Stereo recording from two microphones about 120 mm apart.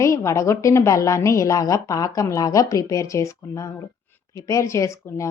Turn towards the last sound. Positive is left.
turn(degrees=25)  # may be behind; listen again after turning